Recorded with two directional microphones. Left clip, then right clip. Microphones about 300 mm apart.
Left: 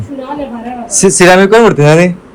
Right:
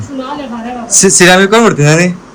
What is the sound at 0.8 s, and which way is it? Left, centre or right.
Speech, centre.